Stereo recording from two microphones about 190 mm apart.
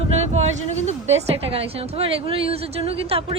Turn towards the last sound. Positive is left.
turn(degrees=-30)  # may be behind; listen again after turning